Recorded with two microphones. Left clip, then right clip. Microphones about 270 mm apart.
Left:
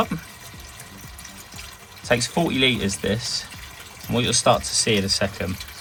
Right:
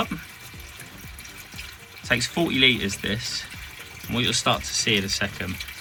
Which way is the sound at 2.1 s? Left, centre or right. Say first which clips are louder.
Left 2 dB; centre.